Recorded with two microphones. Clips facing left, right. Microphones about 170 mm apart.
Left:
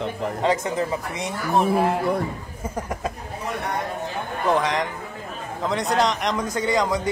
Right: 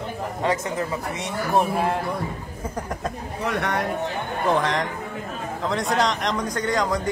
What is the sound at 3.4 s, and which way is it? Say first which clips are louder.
Speech: right 3 dB; 75° right (ahead or behind).